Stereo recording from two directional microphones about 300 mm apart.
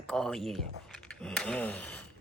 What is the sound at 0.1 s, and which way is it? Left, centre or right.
Speech, centre.